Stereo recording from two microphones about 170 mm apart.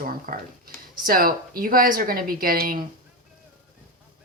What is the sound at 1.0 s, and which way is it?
A woman's voice, 55° right (ahead or behind).